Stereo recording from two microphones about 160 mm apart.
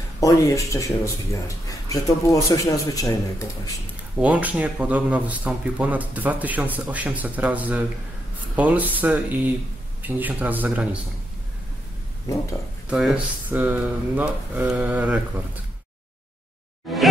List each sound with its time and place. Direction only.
0.2 s speech: 20° left (ahead or behind)
4.2 s speech: 10° right (ahead or behind)
12.9 s speech: 5° right (ahead or behind)
16.9 s music: centre (ahead or behind)